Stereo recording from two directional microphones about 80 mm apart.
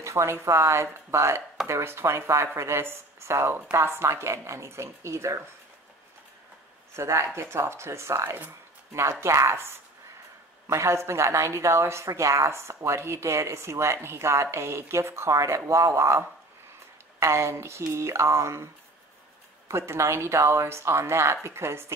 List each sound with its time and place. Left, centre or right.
0.0 s speech: right
7.0 s speech: right
19.7 s speech: right